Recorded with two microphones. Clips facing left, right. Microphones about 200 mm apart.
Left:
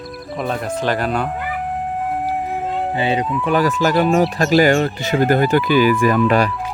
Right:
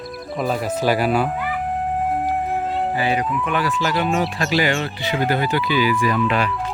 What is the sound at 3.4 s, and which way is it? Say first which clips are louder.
Speech: left 5 dB; 40° left (ahead or behind).